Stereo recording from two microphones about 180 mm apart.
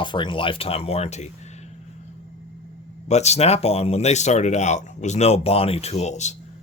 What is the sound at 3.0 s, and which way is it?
Speech, 40° left (ahead or behind).